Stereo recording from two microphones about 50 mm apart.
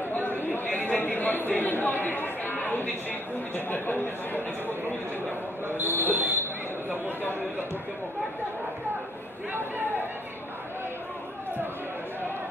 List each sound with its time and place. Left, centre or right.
0.1 s chatter: left
5.9 s speech: left
9.5 s speech: right